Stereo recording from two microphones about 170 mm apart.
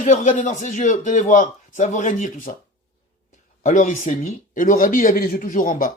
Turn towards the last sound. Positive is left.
turn(degrees=55)  # may be behind; listen again after turning